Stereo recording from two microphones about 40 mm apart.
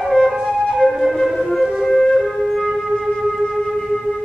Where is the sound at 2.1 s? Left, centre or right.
Centre.